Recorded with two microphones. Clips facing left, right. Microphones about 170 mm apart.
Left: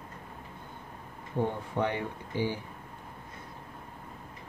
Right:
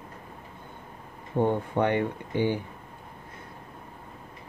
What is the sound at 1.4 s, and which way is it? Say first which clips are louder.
Speech: right 6 dB; 60° right (ahead or behind).